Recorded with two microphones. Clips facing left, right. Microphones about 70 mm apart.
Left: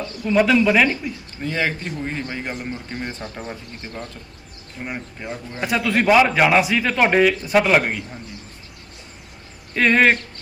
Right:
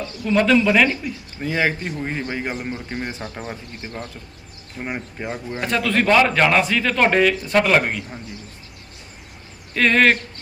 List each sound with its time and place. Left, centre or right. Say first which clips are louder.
0.3 s speech: even; centre
1.4 s speech: right 2 dB; centre
4.8 s speech: right 2 dB; centre
5.5 s a man's voice: even; centre
9.7 s a man's voice: even; centre